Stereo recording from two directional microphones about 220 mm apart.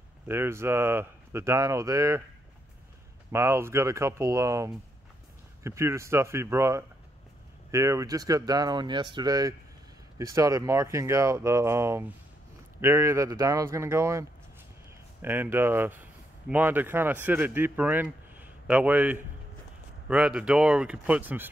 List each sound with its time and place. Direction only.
0.3 s speech: 10° right (ahead or behind)
3.3 s speech: 10° right (ahead or behind)
15.2 s speech: 10° right (ahead or behind)